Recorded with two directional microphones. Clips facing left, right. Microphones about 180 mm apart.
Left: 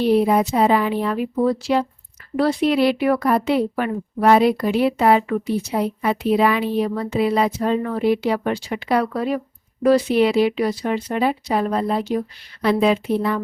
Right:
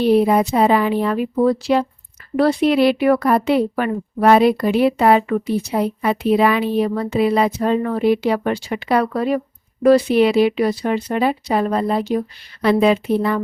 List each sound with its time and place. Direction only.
0.3 s a woman's voice: 65° right (ahead or behind)